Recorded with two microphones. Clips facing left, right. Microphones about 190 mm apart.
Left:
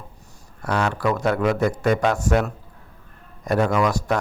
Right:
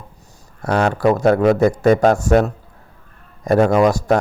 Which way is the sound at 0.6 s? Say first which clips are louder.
Right 6 dB; 45° right (ahead or behind).